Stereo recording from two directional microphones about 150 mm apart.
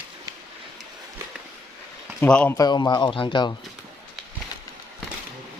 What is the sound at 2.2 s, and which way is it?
Speech, 10° left (ahead or behind).